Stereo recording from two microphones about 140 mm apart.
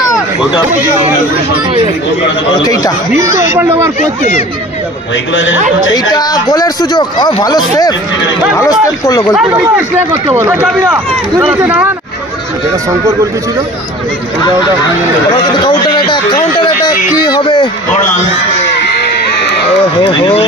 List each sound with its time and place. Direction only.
2.6 s speech: 25° left (ahead or behind)
3.5 s speech: 15° right (ahead or behind)
5.9 s speech: 30° left (ahead or behind)
9.3 s speech: 5° right (ahead or behind)
10.3 s speech: 15° right (ahead or behind)
15.6 s a man's voice: 35° left (ahead or behind)
20.0 s speech: 35° left (ahead or behind)